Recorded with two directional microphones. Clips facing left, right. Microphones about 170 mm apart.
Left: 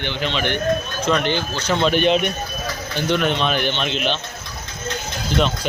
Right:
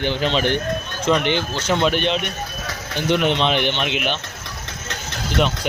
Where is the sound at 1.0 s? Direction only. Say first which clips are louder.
Right 2 dB; 20° right (ahead or behind).